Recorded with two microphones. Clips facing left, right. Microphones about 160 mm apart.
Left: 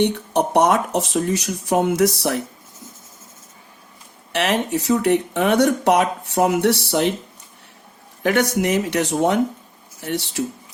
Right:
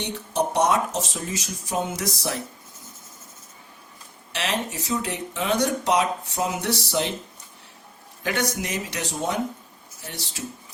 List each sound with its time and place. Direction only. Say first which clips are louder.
0.0 s speech: left 7 dB; 60° left (ahead or behind)
4.4 s speech: left 8 dB; 60° left (ahead or behind)
8.2 s speech: left 8 dB; 65° left (ahead or behind)